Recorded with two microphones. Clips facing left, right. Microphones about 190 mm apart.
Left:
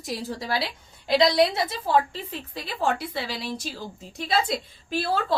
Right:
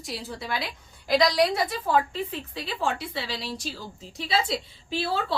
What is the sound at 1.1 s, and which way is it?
Speech, 25° left (ahead or behind).